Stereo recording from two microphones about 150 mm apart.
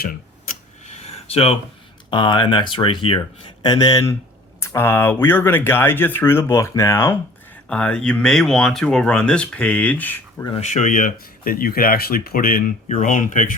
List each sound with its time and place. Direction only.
0.9 s a sound: 45° left (ahead or behind)
2.0 s speech: 30° left (ahead or behind); by 10.4 s 10° left (ahead or behind)
10.5 s speech: 50° left (ahead or behind)